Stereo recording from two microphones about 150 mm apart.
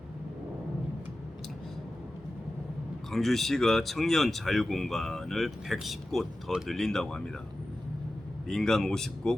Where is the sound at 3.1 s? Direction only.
Centre (ahead or behind).